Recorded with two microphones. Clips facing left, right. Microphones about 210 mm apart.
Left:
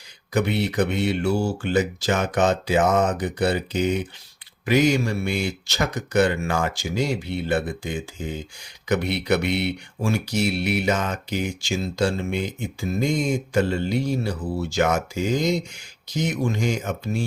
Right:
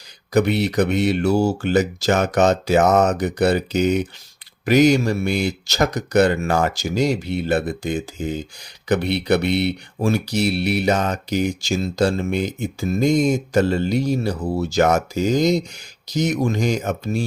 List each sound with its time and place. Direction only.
0.3 s speech: 40° right (ahead or behind)